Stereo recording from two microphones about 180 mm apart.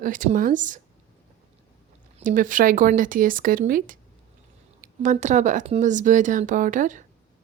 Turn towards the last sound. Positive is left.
turn(degrees=-45)  # may be behind; listen again after turning